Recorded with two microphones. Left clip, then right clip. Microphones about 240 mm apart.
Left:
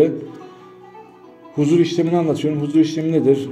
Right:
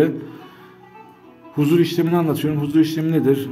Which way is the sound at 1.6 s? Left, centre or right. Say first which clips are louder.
Left 1 dB; right.